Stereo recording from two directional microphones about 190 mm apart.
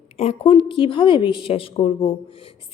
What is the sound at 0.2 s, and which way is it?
Speech, 30° left (ahead or behind).